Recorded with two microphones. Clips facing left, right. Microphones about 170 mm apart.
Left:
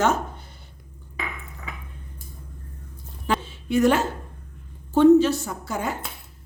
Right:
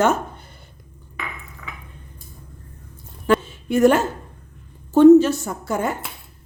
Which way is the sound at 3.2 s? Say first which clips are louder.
Right 7 dB; 50° right (ahead or behind).